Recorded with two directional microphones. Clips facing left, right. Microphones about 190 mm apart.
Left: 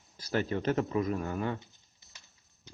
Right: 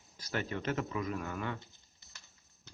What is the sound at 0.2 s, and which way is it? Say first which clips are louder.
Speech: left 6 dB; 30° left (ahead or behind).